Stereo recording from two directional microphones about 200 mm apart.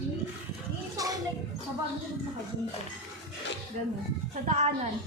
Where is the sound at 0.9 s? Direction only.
20° right (ahead or behind).